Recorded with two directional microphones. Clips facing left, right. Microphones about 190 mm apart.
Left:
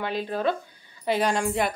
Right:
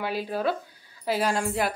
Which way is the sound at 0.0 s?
5° right (ahead or behind).